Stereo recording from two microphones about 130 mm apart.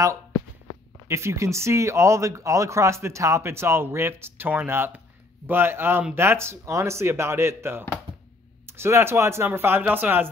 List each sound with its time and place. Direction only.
1.0 s speech: 20° right (ahead or behind)